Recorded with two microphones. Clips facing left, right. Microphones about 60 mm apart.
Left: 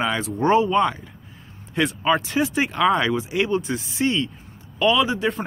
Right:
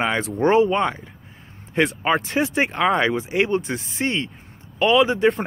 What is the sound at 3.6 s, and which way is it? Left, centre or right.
Speech, right.